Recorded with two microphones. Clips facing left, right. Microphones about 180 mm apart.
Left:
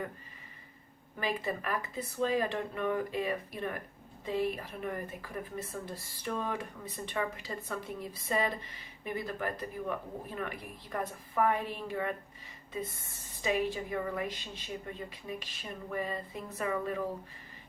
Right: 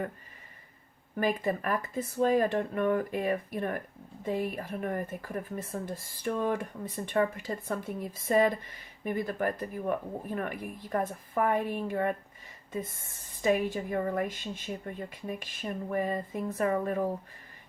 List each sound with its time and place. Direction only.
1.2 s speech: 50° right (ahead or behind)